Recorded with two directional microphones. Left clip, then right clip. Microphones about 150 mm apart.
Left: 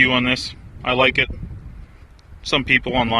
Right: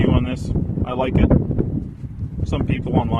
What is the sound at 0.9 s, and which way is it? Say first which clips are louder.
Speech: left 7 dB; 5° left (ahead or behind).